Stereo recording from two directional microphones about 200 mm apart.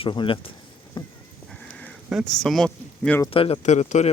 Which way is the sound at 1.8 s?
5° left (ahead or behind).